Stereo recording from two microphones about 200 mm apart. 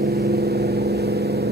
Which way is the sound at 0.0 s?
55° right (ahead or behind).